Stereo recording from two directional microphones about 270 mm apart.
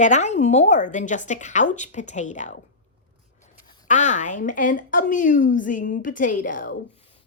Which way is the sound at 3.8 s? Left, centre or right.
Left.